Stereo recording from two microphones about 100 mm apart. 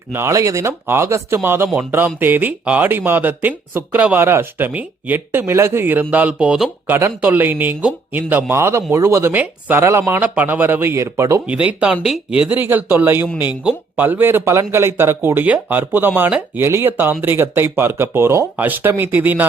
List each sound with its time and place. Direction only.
0.1 s speech: 30° right (ahead or behind)
9.8 s speech: 25° right (ahead or behind)
11.4 s speech: 10° right (ahead or behind)